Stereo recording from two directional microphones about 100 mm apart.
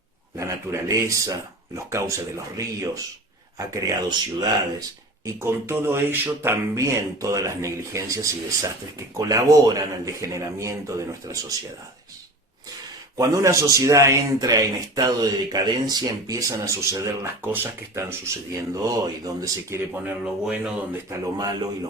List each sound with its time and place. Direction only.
0.3 s a man's voice: 30° right (ahead or behind)
4.1 s a man's voice: 40° right (ahead or behind)
13.1 s a man's voice: 30° right (ahead or behind)
19.9 s speech: 10° right (ahead or behind)
21.1 s a man's voice: 40° right (ahead or behind)